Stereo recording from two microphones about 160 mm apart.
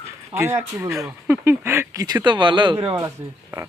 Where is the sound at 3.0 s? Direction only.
20° right (ahead or behind).